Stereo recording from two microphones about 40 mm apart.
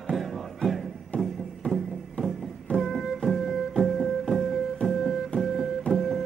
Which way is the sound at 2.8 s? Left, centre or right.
Centre.